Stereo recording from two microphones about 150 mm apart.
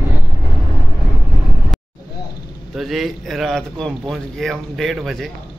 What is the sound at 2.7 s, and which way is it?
Speech, centre (ahead or behind).